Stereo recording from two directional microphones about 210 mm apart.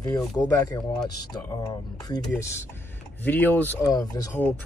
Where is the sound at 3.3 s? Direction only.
10° left (ahead or behind).